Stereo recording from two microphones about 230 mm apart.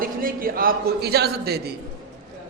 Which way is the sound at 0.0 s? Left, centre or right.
Right.